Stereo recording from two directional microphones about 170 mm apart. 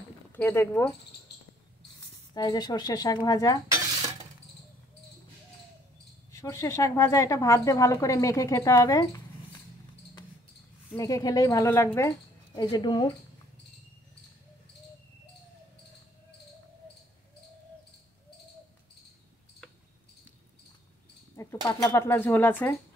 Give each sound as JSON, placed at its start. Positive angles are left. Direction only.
{"t": 0.3, "sound": "a woman's voice", "side_deg": 15}
{"t": 2.3, "sound": "speech", "side_deg": 25}
{"t": 6.3, "sound": "a woman's voice", "side_deg": 15}
{"t": 11.0, "sound": "speech", "side_deg": 20}
{"t": 12.5, "sound": "speech", "side_deg": 25}
{"t": 21.4, "sound": "a sound", "side_deg": 20}
{"t": 21.8, "sound": "a woman's voice", "side_deg": 15}